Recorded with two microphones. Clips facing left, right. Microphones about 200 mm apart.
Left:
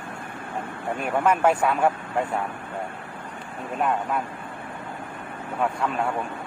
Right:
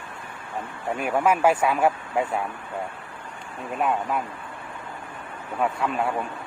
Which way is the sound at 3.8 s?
Centre (ahead or behind).